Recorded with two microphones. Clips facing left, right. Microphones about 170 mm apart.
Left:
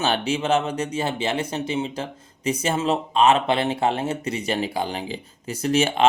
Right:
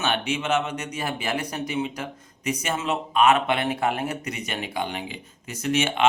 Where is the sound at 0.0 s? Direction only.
30° left (ahead or behind).